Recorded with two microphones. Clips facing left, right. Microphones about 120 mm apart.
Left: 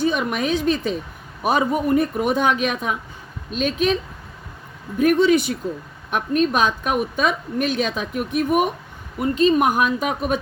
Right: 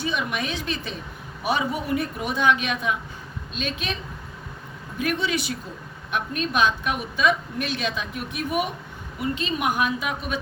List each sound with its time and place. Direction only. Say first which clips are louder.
0.0 s a woman's voice: left 6 dB; 45° left (ahead or behind)
4.9 s a woman's voice: left 10 dB; 45° left (ahead or behind)